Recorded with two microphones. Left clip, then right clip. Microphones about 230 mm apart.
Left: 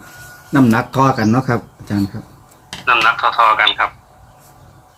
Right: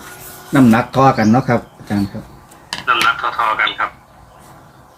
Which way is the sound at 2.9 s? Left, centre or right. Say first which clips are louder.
Left 2 dB; left.